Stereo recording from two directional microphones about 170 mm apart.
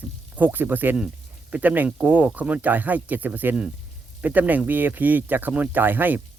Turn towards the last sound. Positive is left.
turn(degrees=-10)  # may be behind; listen again after turning